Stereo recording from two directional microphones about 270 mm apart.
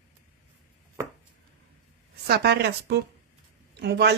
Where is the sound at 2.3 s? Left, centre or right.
Right.